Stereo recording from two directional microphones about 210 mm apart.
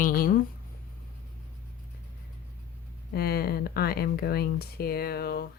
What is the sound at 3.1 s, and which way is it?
Speech, 45° left (ahead or behind).